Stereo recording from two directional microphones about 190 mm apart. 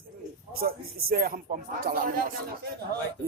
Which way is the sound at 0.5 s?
50° right (ahead or behind).